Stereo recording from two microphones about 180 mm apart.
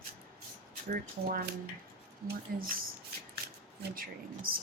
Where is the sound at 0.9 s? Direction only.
55° right (ahead or behind).